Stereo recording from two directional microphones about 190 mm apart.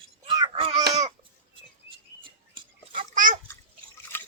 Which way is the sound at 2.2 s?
25° right (ahead or behind).